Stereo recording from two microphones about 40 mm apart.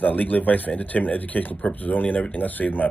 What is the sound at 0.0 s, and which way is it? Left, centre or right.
Speech, left.